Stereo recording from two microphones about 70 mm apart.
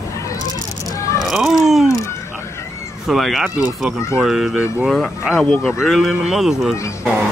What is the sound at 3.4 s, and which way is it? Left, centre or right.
Speech, centre.